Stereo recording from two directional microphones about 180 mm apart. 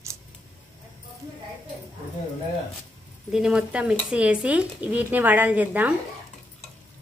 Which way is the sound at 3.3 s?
5° right (ahead or behind).